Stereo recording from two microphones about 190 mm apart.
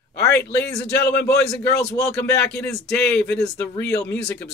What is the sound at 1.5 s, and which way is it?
Speech, 15° left (ahead or behind).